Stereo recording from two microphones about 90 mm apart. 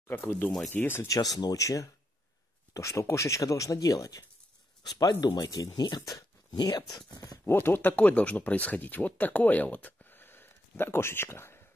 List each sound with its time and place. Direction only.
0.1 s speech: 20° left (ahead or behind)
1.0 s speech: 40° left (ahead or behind)
6.1 s a sound: 50° left (ahead or behind)
7.4 s speech: 25° left (ahead or behind)